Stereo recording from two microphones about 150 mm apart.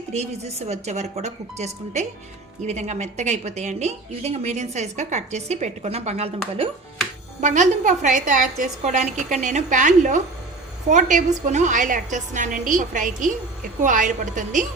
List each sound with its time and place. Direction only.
0.1 s speech: 45° right (ahead or behind)
7.4 s a woman's voice: 55° right (ahead or behind)